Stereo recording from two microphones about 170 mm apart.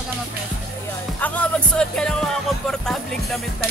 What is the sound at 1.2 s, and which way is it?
Speech, 10° left (ahead or behind).